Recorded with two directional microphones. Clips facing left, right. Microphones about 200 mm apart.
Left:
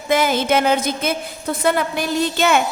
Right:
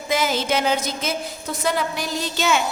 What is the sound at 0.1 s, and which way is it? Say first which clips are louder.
A woman's voice: left 5 dB; 55° left (ahead or behind).